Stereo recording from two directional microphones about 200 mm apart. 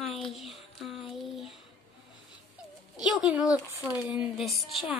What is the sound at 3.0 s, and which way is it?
A child's voice, centre (ahead or behind).